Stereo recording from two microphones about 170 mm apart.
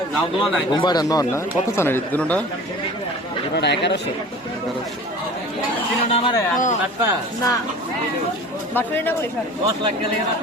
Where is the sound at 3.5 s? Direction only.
85° left.